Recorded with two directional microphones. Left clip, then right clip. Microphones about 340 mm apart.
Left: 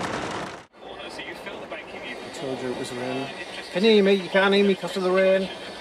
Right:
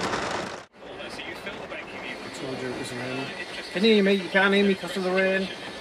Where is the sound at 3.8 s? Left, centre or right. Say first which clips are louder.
Left 3 dB; centre.